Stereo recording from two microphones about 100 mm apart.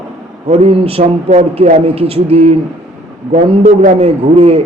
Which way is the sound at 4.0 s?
85° right.